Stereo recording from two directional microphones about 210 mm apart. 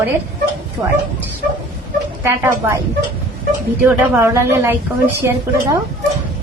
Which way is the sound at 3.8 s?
15° right (ahead or behind).